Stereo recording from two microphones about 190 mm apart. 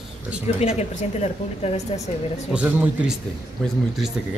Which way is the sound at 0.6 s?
35° left (ahead or behind).